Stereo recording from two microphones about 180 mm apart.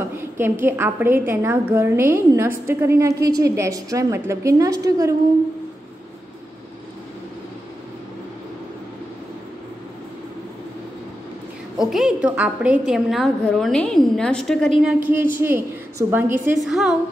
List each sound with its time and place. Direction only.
0.2 s a woman's voice: 15° right (ahead or behind)
11.8 s a woman's voice: centre (ahead or behind)
14.9 s a woman's voice: 10° right (ahead or behind)
16.6 s a woman's voice: centre (ahead or behind)